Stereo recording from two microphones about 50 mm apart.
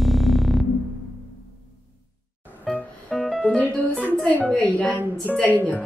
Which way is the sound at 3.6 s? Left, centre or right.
Left.